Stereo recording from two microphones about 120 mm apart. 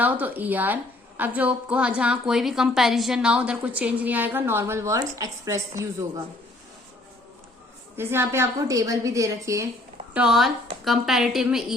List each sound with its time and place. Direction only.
0.0 s a woman's voice: 15° right (ahead or behind)
7.9 s a woman's voice: 20° right (ahead or behind)
10.2 s a woman's voice: 5° right (ahead or behind)